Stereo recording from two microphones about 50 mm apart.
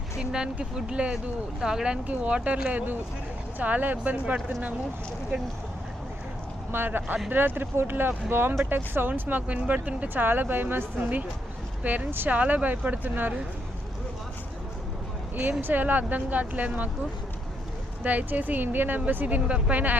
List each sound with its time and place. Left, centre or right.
0.2 s speech: centre
2.0 s speech: right
6.7 s speech: right
9.6 s speech: right
10.2 s speech: right
11.8 s speech: right
15.6 s speech: right
18.0 s speech: right